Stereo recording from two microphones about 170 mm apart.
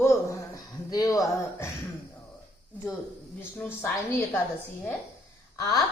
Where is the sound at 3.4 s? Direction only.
15° left (ahead or behind).